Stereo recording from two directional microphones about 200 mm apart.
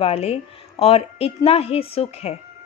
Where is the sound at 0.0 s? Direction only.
30° left (ahead or behind).